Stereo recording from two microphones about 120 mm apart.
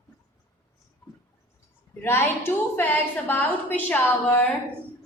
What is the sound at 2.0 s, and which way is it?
A woman's voice, 20° left (ahead or behind).